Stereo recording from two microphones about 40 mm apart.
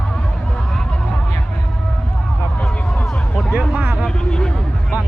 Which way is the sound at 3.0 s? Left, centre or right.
Centre.